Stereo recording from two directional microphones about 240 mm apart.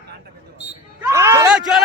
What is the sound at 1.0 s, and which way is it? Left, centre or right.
Speech, centre.